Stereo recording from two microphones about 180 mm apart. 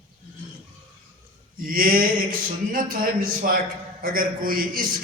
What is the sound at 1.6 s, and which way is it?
Speech, 50° right (ahead or behind).